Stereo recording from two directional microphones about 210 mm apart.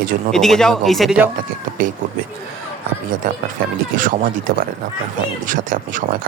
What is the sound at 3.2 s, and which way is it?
Speech, 40° right (ahead or behind).